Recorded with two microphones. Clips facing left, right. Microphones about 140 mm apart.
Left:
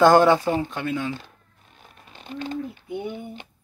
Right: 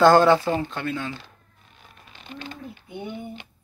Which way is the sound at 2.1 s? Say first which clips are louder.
Left 4 dB; 40° left (ahead or behind).